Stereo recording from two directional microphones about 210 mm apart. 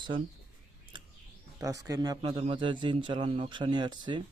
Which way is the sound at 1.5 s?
15° right (ahead or behind).